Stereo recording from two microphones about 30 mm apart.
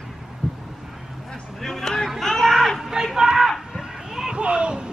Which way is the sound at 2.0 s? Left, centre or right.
Centre.